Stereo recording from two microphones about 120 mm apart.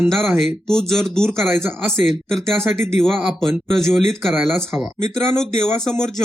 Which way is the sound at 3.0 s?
Centre (ahead or behind).